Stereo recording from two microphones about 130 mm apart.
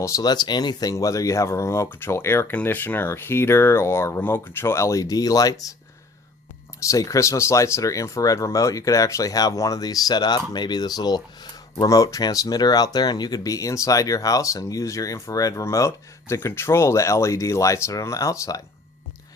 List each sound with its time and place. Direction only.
0.0 s speech: 30° left (ahead or behind)
6.8 s speech: 25° left (ahead or behind)